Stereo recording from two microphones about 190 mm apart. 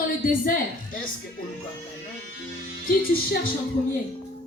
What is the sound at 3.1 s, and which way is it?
Speech, 50° left (ahead or behind).